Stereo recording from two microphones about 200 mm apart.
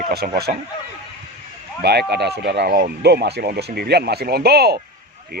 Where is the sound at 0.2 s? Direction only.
45° right (ahead or behind).